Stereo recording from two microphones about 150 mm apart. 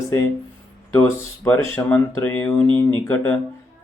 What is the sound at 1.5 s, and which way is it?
Speech, 15° left (ahead or behind).